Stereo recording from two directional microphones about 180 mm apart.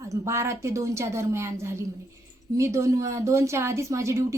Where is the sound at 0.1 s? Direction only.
15° right (ahead or behind).